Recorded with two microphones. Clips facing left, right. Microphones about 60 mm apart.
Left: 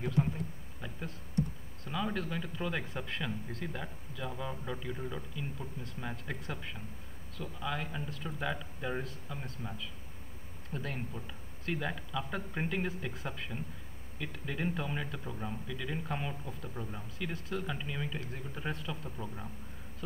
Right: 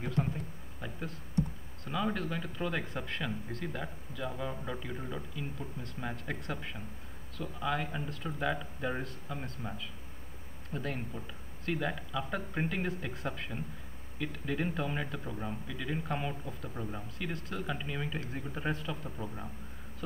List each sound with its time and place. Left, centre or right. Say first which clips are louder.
0.2 s speech: left 2 dB; centre
1.9 s speech: right 2 dB; centre
3.8 s speech: right 2 dB; centre
17.3 s speech: left 1 dB; centre
17.6 s speech: right 1 dB; centre